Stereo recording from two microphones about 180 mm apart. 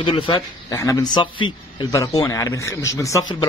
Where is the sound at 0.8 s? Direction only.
15° left (ahead or behind).